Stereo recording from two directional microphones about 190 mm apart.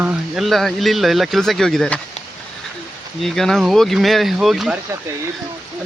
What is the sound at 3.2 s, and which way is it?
Speech, centre (ahead or behind).